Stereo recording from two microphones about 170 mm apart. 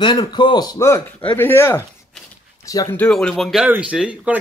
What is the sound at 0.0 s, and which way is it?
A man's voice, 25° left (ahead or behind).